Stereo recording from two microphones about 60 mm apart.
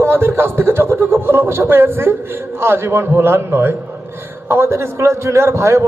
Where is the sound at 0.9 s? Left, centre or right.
Right.